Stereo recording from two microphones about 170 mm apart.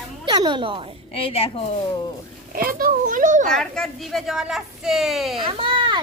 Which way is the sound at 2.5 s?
55° right (ahead or behind).